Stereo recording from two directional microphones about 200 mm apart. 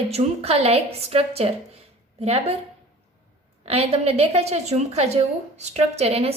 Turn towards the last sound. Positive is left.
turn(degrees=-30)  # may be behind; listen again after turning